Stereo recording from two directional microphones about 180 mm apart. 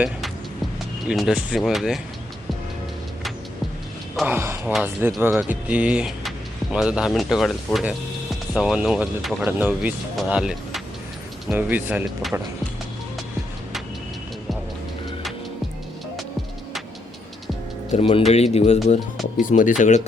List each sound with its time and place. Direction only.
1.0 s speech: centre (ahead or behind)
4.3 s speech: 15° right (ahead or behind)
17.9 s speech: 30° left (ahead or behind); by 19.7 s 45° left (ahead or behind)